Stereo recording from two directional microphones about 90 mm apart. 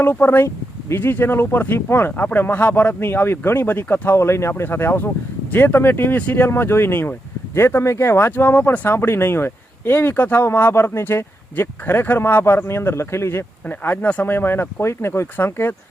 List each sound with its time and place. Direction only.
0.0 s speech: 25° left (ahead or behind)